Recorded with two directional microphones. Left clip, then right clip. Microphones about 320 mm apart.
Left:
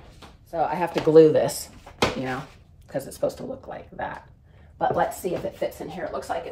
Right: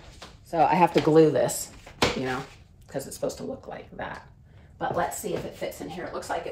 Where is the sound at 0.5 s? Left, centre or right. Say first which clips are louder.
Right 4 dB; right.